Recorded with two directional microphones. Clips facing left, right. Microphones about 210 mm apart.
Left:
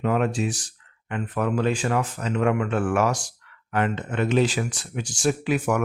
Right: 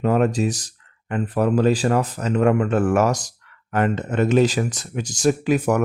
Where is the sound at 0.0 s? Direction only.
40° right (ahead or behind).